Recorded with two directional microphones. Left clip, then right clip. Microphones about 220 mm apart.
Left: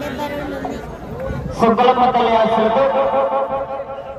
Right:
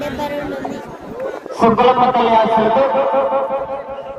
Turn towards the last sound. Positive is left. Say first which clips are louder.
# right 1 dB
turn(degrees=35)  # may be behind; listen again after turning